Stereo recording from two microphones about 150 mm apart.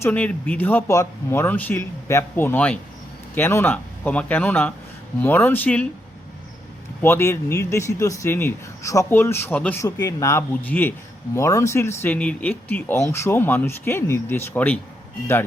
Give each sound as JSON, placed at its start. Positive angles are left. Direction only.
{"t": 0.0, "sound": "speech", "side_deg": 10}
{"t": 7.0, "sound": "speech", "side_deg": 15}